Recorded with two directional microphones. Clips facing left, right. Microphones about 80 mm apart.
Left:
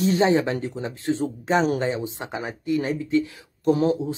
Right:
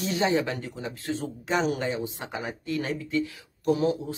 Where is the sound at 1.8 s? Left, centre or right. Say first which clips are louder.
Left 4 dB; left.